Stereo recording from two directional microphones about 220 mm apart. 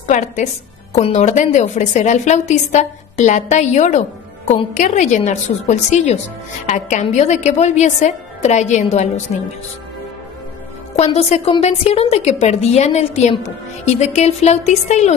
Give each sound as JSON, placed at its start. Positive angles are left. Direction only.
{"t": 0.1, "sound": "a woman's voice", "side_deg": 35}
{"t": 10.9, "sound": "a woman's voice", "side_deg": 30}